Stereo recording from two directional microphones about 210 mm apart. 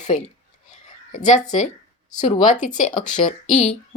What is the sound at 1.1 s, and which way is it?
A woman's voice, 35° left (ahead or behind).